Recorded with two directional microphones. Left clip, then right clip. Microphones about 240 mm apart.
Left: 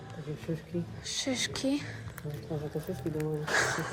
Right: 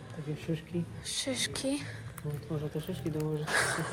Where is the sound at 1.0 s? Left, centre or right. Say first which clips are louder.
Left 1 dB; centre.